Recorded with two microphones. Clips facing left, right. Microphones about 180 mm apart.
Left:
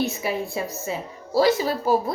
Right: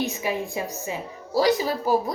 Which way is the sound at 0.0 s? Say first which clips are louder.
Left 1 dB; 15° right (ahead or behind).